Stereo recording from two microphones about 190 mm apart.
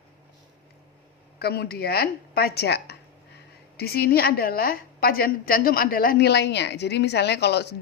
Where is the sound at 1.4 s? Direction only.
55° left (ahead or behind).